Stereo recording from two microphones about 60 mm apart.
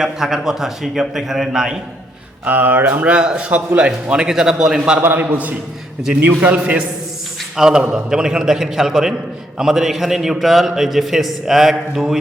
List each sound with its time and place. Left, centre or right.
0.0 s a man's voice: centre
2.4 s speech: right
3.2 s a man's voice: centre
4.9 s a man's voice: right
7.5 s a man's voice: centre